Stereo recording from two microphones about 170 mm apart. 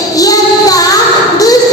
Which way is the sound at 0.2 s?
20° left (ahead or behind).